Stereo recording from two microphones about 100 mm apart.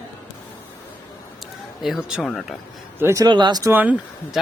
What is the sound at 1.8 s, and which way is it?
Speech, 5° right (ahead or behind).